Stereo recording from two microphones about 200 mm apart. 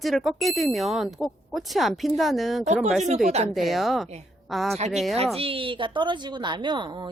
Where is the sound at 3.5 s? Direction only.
Centre (ahead or behind).